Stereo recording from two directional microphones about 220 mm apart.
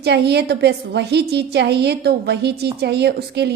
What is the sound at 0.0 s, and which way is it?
A woman's voice, 50° right (ahead or behind).